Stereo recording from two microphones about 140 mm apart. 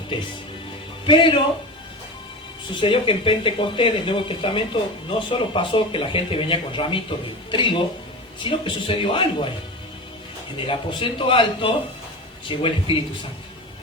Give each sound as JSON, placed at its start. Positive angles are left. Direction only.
{"t": 0.1, "sound": "speech", "side_deg": 35}
{"t": 2.8, "sound": "speech", "side_deg": 40}
{"t": 10.6, "sound": "speech", "side_deg": 40}